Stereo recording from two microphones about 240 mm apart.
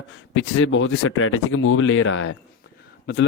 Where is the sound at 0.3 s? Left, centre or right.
Left.